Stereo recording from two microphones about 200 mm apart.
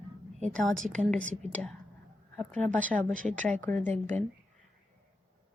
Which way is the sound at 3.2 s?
40° right (ahead or behind).